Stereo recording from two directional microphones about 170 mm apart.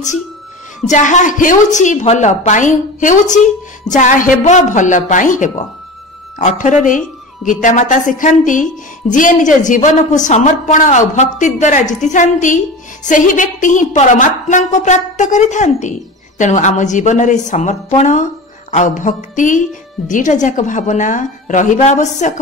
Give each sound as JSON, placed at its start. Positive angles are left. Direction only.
{"t": 0.8, "sound": "a woman's voice", "side_deg": 45}